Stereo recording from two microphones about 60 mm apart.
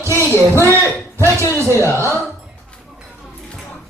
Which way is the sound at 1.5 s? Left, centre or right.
Right.